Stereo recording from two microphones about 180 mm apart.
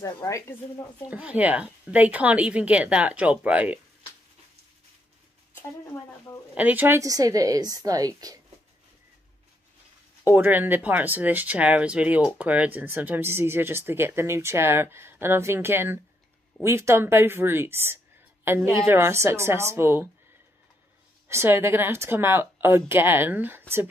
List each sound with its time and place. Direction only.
0.0 s speech: 15° left (ahead or behind)
1.1 s speech: 10° right (ahead or behind)
6.5 s a woman's voice: 10° right (ahead or behind)
10.2 s a woman's voice: 10° right (ahead or behind)
21.3 s speech: 15° right (ahead or behind)